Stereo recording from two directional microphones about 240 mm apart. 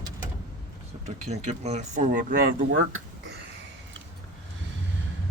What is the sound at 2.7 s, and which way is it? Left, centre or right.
Speech, right.